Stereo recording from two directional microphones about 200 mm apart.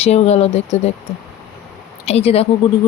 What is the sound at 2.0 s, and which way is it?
Speech, 30° left (ahead or behind).